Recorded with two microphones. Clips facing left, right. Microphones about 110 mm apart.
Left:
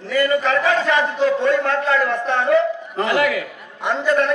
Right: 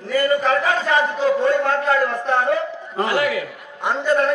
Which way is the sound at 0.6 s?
45° right (ahead or behind).